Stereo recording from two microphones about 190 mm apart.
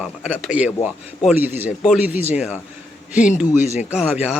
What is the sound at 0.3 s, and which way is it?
Speech, 5° right (ahead or behind).